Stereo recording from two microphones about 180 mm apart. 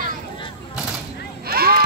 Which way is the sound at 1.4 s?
55° right (ahead or behind).